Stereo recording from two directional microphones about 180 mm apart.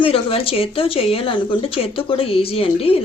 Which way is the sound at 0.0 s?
30° left (ahead or behind).